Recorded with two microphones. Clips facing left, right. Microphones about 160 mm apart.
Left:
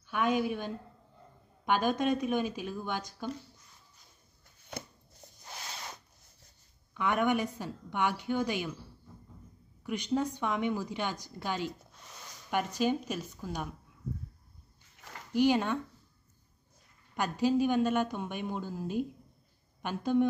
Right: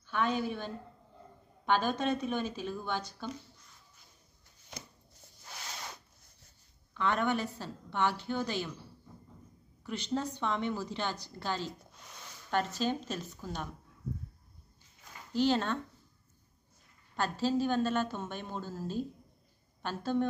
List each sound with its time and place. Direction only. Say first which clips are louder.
0.1 s a woman's voice: left 2 dB; 10° left (ahead or behind)
4.7 s shuffling cards: left 6 dB; 60° left (ahead or behind)
6.9 s a woman's voice: left 2 dB; 10° left (ahead or behind)
9.8 s a woman's voice: left 3 dB; 10° left (ahead or behind)
15.0 s a sound: left 3 dB; 75° left (ahead or behind)
15.3 s a woman's voice: left 2 dB; 15° left (ahead or behind)
17.1 s a woman's voice: left 2 dB; 15° left (ahead or behind)